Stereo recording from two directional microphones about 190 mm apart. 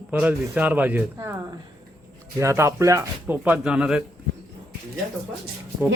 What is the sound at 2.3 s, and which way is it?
Speech, 15° right (ahead or behind).